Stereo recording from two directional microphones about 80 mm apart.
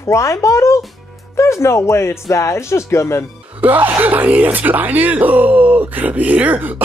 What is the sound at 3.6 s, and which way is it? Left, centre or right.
Speech, right.